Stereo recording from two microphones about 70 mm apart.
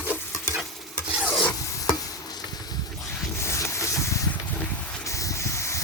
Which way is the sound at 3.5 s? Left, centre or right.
Left.